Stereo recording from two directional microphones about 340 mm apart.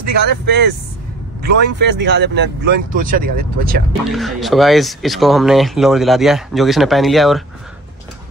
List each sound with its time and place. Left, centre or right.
0.1 s speech: right
4.1 s speech: centre